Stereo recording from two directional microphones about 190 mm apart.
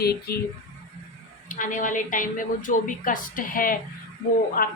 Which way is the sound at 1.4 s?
45° left (ahead or behind).